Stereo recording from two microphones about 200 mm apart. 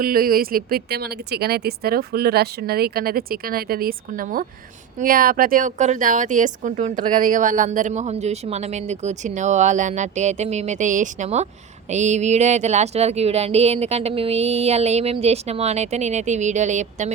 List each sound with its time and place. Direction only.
0.0 s speech: 45° right (ahead or behind)